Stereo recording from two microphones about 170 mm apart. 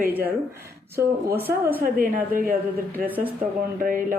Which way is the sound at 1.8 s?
60° right (ahead or behind).